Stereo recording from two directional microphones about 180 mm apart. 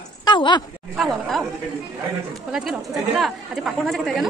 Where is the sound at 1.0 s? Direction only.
Centre (ahead or behind).